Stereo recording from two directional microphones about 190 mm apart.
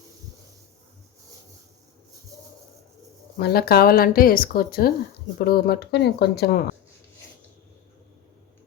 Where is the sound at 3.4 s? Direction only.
55° left (ahead or behind).